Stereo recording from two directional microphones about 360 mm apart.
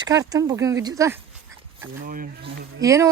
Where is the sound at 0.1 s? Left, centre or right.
Centre.